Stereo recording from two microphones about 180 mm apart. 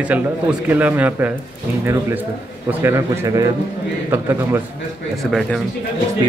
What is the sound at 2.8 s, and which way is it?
A man's voice, 15° right (ahead or behind).